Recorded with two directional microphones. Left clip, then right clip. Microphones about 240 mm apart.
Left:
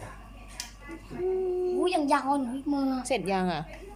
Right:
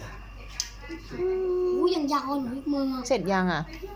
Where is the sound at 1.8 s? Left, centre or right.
Left.